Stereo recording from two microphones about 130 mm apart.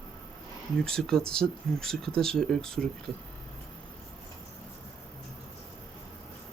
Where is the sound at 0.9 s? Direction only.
5° left (ahead or behind).